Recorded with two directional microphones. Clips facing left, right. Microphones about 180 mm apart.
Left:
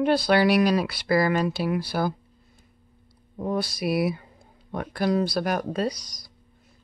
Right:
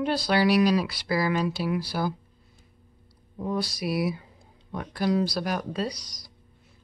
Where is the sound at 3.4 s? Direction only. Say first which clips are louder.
Left 2 dB; 55° left (ahead or behind).